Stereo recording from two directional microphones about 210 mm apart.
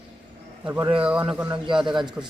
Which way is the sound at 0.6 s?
10° right (ahead or behind).